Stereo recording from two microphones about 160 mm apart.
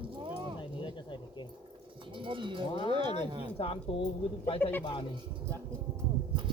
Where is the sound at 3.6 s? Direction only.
35° left (ahead or behind).